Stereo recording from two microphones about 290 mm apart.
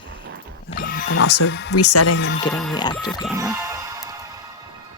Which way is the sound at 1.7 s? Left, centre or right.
Left.